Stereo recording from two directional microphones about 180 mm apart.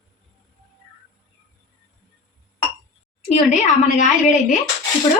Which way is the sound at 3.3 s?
40° left (ahead or behind).